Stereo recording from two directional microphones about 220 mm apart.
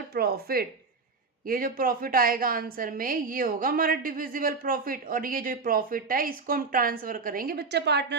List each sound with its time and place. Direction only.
0.1 s a woman's voice: 45° right (ahead or behind)